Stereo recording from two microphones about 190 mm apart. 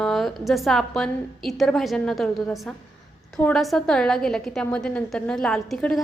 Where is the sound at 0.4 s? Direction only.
Centre (ahead or behind).